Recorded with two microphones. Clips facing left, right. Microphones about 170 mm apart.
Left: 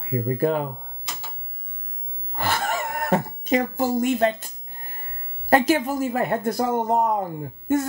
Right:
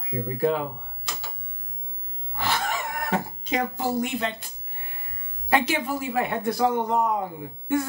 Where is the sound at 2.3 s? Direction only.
50° left (ahead or behind).